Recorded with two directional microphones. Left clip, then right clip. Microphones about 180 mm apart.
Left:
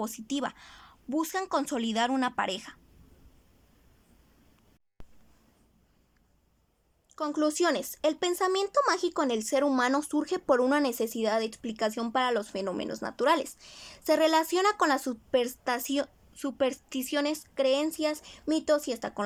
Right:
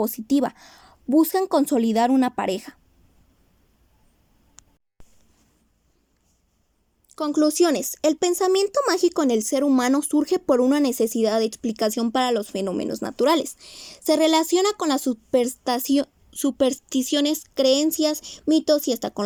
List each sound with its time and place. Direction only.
0.0 s speech: 25° right (ahead or behind)
7.1 s speech: 20° right (ahead or behind)